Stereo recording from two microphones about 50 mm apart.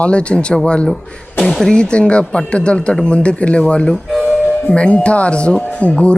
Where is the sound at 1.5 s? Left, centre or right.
Centre.